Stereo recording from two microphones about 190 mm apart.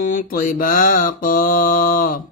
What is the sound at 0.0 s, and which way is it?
Mantra, 45° left (ahead or behind).